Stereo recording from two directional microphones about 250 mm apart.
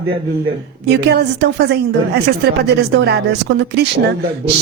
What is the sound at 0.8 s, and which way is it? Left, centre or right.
A woman's voice, right.